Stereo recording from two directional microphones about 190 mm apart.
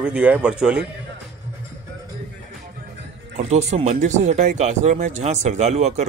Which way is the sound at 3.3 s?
35° right (ahead or behind).